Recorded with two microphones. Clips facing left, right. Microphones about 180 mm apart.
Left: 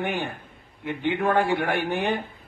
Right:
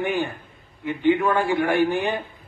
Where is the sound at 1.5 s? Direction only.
60° left (ahead or behind).